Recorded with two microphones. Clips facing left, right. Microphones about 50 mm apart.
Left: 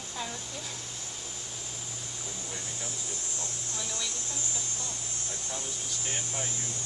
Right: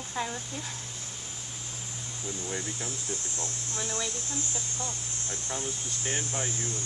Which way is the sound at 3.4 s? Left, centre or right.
Right.